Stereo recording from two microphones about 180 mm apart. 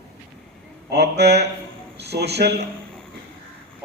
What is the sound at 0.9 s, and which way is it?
A man's voice, 65° right (ahead or behind).